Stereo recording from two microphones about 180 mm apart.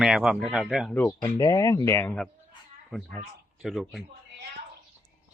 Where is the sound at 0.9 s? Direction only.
10° left (ahead or behind).